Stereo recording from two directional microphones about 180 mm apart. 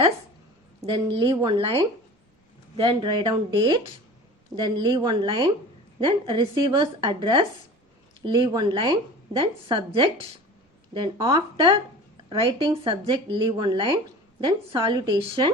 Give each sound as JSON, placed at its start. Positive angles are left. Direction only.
{"t": 0.9, "sound": "a woman's voice", "side_deg": -25}